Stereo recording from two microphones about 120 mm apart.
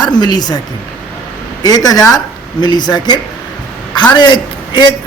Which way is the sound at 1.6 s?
30° left (ahead or behind).